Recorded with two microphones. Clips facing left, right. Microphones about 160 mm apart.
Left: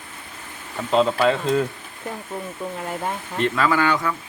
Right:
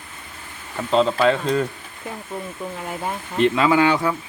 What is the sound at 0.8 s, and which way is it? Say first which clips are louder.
Speech: right 1 dB; 5° left (ahead or behind).